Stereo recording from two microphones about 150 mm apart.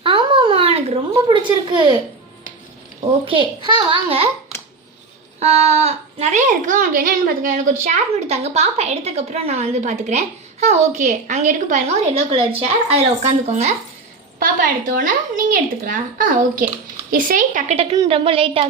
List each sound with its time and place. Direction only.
0.0 s a sound: 35° right (ahead or behind)
3.2 s a child's voice: 35° right (ahead or behind)
5.4 s a woman's voice: 45° right (ahead or behind)
14.3 s speech: 70° right (ahead or behind)
18.1 s a child's voice: 40° right (ahead or behind)